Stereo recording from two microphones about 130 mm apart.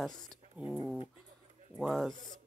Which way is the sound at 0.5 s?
10° right (ahead or behind).